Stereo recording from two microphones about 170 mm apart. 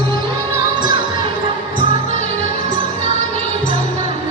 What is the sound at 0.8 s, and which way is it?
Music, 25° right (ahead or behind).